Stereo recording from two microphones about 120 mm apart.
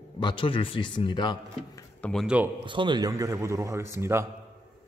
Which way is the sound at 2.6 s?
40° right (ahead or behind).